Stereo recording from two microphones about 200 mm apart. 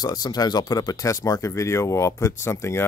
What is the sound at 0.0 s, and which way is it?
Speech, 20° left (ahead or behind).